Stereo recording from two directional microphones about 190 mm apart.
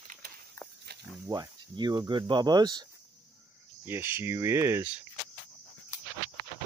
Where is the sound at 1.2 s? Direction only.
20° right (ahead or behind).